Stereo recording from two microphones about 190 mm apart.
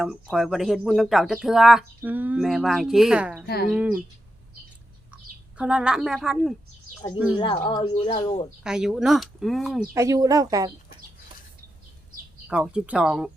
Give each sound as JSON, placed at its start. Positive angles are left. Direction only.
{"t": 0.0, "sound": "speech", "side_deg": 0}
{"t": 3.4, "sound": "speech", "side_deg": 55}
{"t": 3.7, "sound": "speech", "side_deg": -5}
{"t": 5.1, "sound": "speech", "side_deg": -5}
{"t": 7.3, "sound": "speech", "side_deg": 25}
{"t": 8.6, "sound": "speech", "side_deg": -5}
{"t": 9.9, "sound": "speech", "side_deg": -15}
{"t": 12.5, "sound": "speech", "side_deg": -5}